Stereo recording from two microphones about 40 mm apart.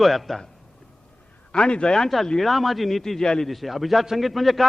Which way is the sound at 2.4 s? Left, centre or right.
Centre.